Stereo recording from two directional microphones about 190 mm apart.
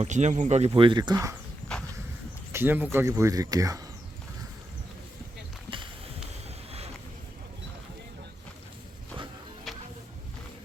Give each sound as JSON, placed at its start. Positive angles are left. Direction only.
{"t": 0.0, "sound": "speech", "side_deg": -35}
{"t": 2.5, "sound": "speech", "side_deg": -10}
{"t": 9.7, "sound": "music", "side_deg": 0}